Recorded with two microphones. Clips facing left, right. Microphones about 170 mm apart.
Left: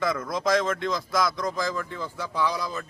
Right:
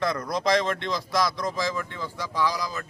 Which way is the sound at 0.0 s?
Centre (ahead or behind).